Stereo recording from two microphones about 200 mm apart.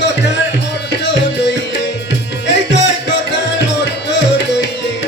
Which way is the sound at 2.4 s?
60° left (ahead or behind).